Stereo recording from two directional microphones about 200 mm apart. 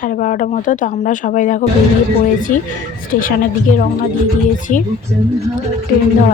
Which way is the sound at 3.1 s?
45° left (ahead or behind).